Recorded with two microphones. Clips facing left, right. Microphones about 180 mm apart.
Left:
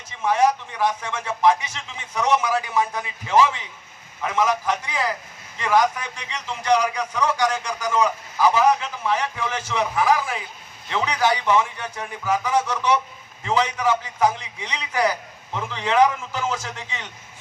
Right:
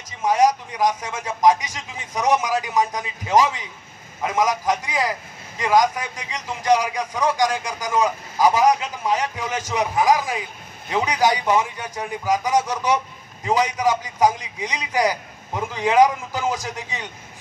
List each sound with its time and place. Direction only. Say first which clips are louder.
0.2 s a man's voice: right 2 dB; 15° right (ahead or behind)